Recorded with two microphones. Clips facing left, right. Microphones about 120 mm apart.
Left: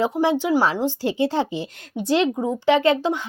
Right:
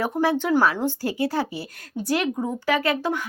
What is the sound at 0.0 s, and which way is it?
Speech, 15° left (ahead or behind).